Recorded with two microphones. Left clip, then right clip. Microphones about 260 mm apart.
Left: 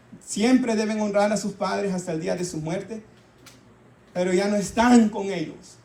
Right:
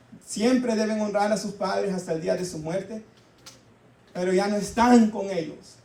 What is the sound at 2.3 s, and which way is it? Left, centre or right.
Speech, left.